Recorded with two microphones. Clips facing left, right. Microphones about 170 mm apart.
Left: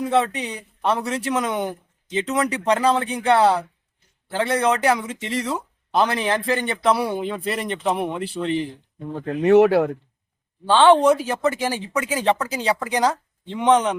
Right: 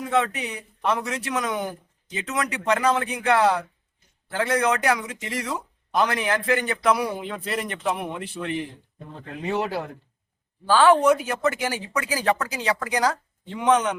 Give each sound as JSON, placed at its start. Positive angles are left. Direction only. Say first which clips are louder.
{"t": 0.1, "sound": "speech", "louder": "even", "side_deg": 30}
{"t": 9.4, "sound": "speech", "louder": "left 13 dB", "side_deg": 70}
{"t": 10.7, "sound": "speech", "louder": "left 3 dB", "side_deg": 25}